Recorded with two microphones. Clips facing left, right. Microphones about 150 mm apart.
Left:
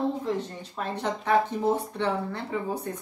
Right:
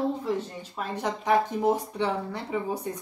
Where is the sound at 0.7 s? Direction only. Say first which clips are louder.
Even; 10° right (ahead or behind).